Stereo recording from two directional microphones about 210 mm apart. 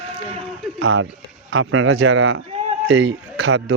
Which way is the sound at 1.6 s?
75° right (ahead or behind).